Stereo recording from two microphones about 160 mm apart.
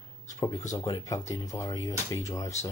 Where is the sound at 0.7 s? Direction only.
20° left (ahead or behind).